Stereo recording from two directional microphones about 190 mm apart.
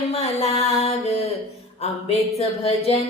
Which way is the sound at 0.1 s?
35° left (ahead or behind).